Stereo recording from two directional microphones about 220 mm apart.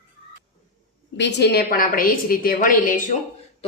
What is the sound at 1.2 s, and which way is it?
Speech, 50° left (ahead or behind).